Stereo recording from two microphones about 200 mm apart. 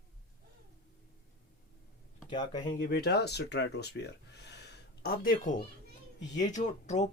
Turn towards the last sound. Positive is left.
turn(degrees=35)  # may be behind; listen again after turning